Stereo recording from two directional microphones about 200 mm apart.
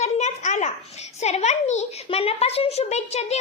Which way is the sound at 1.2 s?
35° left (ahead or behind).